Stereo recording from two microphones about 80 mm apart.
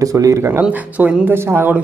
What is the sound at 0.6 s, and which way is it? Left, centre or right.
Speech, centre.